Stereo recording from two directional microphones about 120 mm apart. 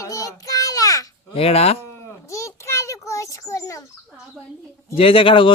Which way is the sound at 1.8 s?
25° left (ahead or behind).